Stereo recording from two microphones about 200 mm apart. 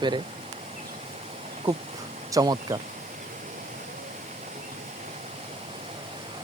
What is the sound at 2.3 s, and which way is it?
Speech, 20° right (ahead or behind).